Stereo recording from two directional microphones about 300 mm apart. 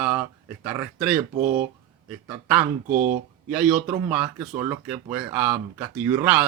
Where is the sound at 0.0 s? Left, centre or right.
Centre.